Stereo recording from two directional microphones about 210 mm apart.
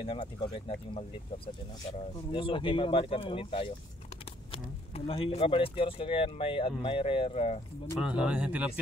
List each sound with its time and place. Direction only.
0.0 s speech: 25° left (ahead or behind)
2.3 s speech: 25° left (ahead or behind)
8.2 s speech: 5° right (ahead or behind)